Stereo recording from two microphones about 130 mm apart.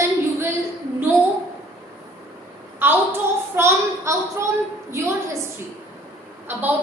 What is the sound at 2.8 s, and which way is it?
A woman's voice, 15° right (ahead or behind).